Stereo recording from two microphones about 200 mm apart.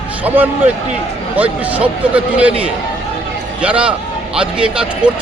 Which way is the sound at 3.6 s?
5° right (ahead or behind).